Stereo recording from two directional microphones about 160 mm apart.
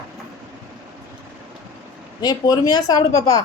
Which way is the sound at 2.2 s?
25° left (ahead or behind).